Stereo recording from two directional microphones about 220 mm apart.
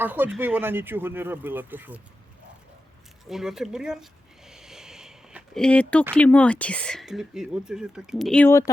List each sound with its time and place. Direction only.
0.0 s speech: 10° right (ahead or behind)
3.2 s a sound: centre (ahead or behind)
6.1 s speech: 5° left (ahead or behind)